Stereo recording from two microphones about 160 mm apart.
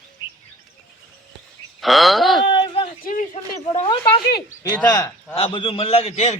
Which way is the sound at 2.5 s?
30° left (ahead or behind).